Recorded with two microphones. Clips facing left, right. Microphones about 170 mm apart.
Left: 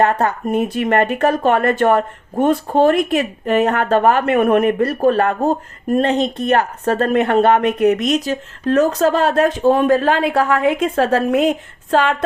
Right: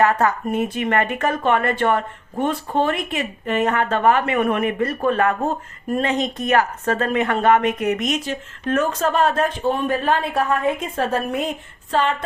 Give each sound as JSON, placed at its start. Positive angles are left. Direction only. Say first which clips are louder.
{"t": 0.0, "sound": "speech", "louder": "left 2 dB", "side_deg": 30}
{"t": 9.7, "sound": "a woman's voice", "louder": "left 6 dB", "side_deg": 90}